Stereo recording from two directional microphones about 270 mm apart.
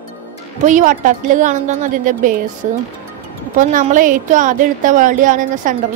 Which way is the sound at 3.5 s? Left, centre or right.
Right.